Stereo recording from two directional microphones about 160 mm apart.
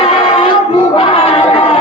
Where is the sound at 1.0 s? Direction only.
35° left (ahead or behind).